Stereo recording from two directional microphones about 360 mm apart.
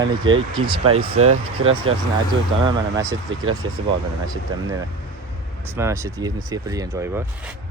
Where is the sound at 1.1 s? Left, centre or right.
Right.